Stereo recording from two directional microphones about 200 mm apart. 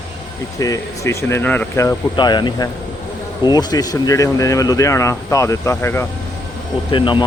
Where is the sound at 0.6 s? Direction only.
15° left (ahead or behind).